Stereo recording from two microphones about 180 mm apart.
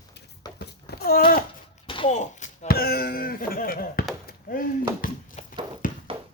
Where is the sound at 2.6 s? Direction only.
55° left (ahead or behind).